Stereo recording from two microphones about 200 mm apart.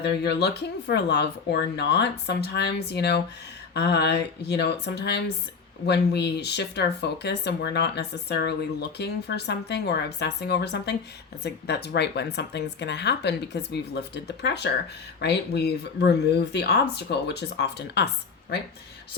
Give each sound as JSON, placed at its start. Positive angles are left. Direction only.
{"t": 0.0, "sound": "speech", "side_deg": 55}